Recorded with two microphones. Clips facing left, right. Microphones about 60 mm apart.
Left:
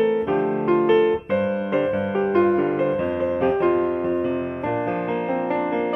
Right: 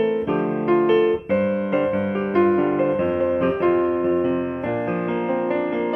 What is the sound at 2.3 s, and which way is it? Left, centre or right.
Music, right.